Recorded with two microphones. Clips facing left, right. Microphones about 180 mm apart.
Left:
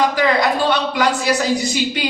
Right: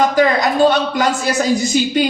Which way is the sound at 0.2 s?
45° right (ahead or behind).